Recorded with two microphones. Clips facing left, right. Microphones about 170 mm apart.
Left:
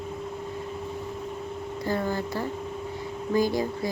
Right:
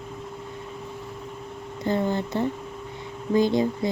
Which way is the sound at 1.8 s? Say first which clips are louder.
Right 4 dB; 20° right (ahead or behind).